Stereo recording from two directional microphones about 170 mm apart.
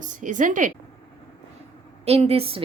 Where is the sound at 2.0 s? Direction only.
35° right (ahead or behind).